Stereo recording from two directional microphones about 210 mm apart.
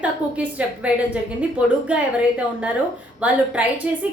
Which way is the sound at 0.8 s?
5° right (ahead or behind).